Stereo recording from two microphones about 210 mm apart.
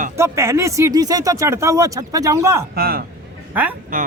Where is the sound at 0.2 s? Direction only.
15° right (ahead or behind).